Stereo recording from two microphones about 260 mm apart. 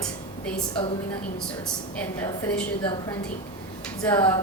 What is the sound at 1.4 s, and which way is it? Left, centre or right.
A woman's voice, centre.